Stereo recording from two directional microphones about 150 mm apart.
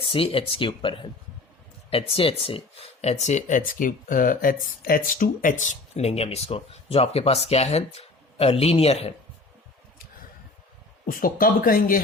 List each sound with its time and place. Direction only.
0.1 s speech: 35° left (ahead or behind)
11.0 s speech: 70° left (ahead or behind)